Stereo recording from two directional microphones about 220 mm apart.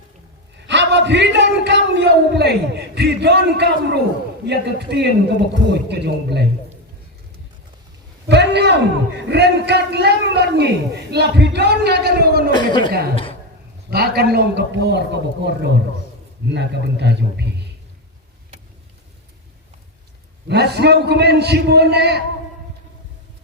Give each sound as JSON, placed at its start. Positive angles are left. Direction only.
{"t": 0.7, "sound": "a sound", "side_deg": -55}
{"t": 4.4, "sound": "a man's voice", "side_deg": -50}
{"t": 8.3, "sound": "a man's voice", "side_deg": -50}
{"t": 13.9, "sound": "a man's voice", "side_deg": -45}
{"t": 20.5, "sound": "a man's voice", "side_deg": -50}